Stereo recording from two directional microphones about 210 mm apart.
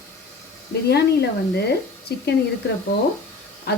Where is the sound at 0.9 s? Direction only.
50° left (ahead or behind).